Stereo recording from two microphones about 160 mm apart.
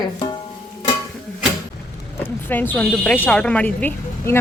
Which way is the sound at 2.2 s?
10° left (ahead or behind).